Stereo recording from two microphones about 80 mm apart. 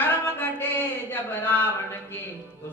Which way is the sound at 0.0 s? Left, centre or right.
Left.